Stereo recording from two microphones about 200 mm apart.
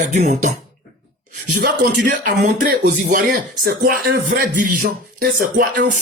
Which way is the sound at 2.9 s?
35° right (ahead or behind).